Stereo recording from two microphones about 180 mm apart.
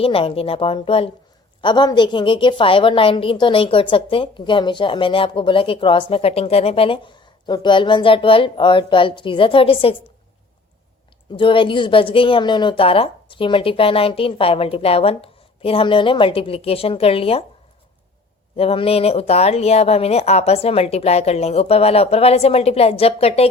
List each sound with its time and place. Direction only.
0.0 s a woman's voice: 30° left (ahead or behind)
11.3 s a woman's voice: 30° left (ahead or behind)
18.5 s a woman's voice: 30° left (ahead or behind)